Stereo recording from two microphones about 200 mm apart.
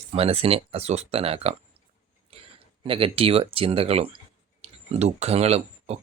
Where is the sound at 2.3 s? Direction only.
30° right (ahead or behind).